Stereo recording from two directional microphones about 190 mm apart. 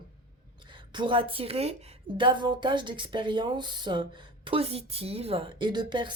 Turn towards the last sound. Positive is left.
turn(degrees=-25)  # may be behind; listen again after turning